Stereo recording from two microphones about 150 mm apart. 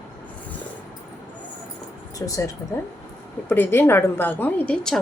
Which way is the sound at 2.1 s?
20° left (ahead or behind).